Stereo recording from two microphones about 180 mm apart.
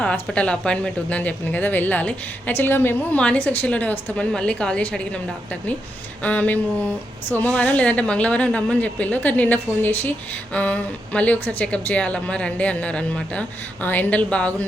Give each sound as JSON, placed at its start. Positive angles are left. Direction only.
{"t": 0.0, "sound": "a woman's voice", "side_deg": 5}
{"t": 6.2, "sound": "a woman's voice", "side_deg": 10}